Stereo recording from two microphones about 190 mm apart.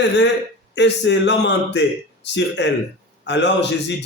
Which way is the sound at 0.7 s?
70° left (ahead or behind).